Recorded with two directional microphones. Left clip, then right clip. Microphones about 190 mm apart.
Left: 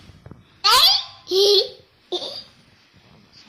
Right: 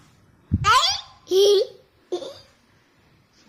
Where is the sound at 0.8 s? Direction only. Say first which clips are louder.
Left 6 dB; 40° right (ahead or behind).